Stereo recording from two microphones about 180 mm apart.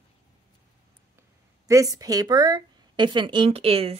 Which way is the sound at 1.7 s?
20° right (ahead or behind).